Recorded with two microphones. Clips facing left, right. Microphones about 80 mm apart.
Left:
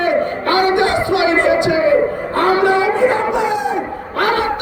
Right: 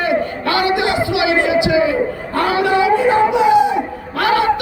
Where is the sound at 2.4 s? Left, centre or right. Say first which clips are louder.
Left 3 dB; left.